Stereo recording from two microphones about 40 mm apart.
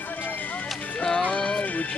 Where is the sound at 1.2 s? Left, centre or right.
Left.